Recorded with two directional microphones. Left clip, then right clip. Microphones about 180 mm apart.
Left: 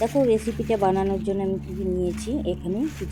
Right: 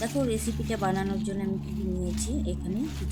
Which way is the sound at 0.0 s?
10° left (ahead or behind).